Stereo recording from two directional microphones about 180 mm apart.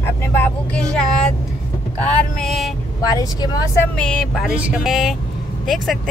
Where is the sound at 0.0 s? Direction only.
10° left (ahead or behind).